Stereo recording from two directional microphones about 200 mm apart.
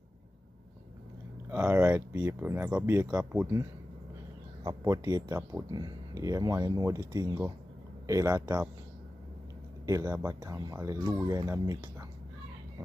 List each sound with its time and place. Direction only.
1.5 s speech: 10° right (ahead or behind)
9.8 s speech: 15° right (ahead or behind)